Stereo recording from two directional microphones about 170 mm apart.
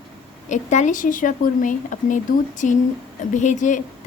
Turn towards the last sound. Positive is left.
turn(degrees=45)  # may be behind; listen again after turning